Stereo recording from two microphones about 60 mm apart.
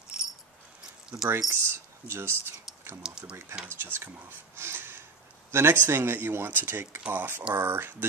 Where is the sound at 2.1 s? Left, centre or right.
Right.